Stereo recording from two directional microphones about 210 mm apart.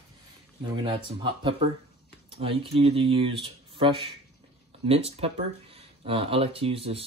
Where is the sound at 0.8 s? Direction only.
25° right (ahead or behind).